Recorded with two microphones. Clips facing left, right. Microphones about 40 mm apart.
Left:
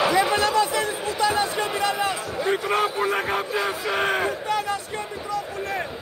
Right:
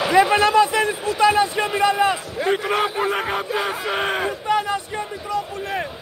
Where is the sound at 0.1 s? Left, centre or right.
Right.